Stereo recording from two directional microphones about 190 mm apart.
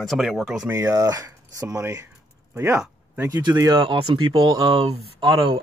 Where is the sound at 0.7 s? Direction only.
15° right (ahead or behind).